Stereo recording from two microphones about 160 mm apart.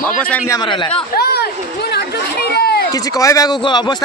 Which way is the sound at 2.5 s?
80° left.